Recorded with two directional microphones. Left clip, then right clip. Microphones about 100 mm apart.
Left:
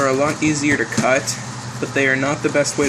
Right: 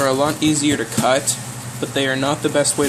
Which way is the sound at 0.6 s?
15° right (ahead or behind).